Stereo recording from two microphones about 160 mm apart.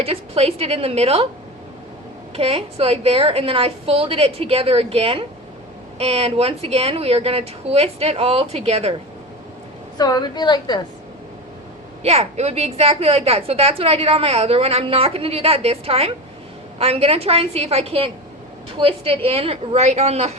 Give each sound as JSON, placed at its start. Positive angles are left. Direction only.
{"t": 0.0, "sound": "a woman's voice", "side_deg": -35}
{"t": 2.3, "sound": "a woman's voice", "side_deg": -35}
{"t": 10.0, "sound": "a woman's voice", "side_deg": 25}
{"t": 12.0, "sound": "a woman's voice", "side_deg": -40}